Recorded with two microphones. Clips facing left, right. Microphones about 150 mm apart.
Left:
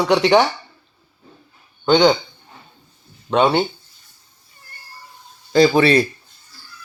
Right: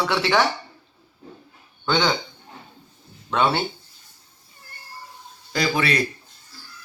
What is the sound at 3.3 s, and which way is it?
Speech, 20° left (ahead or behind).